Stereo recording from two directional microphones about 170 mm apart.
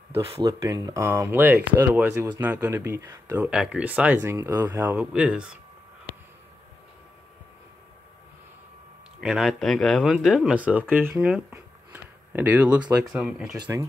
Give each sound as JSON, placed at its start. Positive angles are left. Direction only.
{"t": 0.1, "sound": "speech", "side_deg": -35}
{"t": 0.5, "sound": "speech", "side_deg": -20}
{"t": 9.2, "sound": "speech", "side_deg": 0}